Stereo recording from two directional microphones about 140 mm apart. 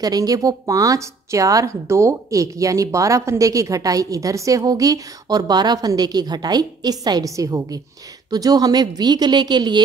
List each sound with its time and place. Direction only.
0.0 s a woman's voice: 25° right (ahead or behind)